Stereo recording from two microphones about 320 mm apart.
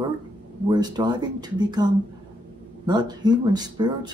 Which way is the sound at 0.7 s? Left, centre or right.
Centre.